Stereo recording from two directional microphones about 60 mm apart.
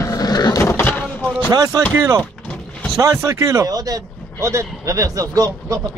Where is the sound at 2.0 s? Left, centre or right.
Right.